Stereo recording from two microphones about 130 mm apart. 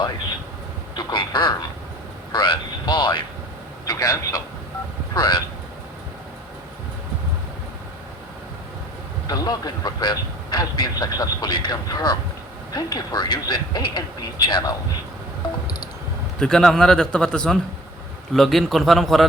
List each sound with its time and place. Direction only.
0.9 s a man's voice: 35° left (ahead or behind)
9.2 s speech: 30° left (ahead or behind)
16.4 s a man's voice: 5° left (ahead or behind)